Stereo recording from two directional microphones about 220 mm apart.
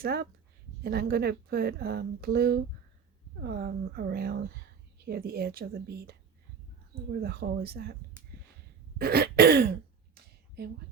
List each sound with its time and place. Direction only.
0.0 s a woman's voice: 45° right (ahead or behind)
9.0 s a woman's voice: 45° right (ahead or behind)